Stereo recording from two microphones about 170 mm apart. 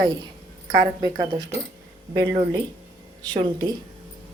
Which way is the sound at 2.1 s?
25° right (ahead or behind).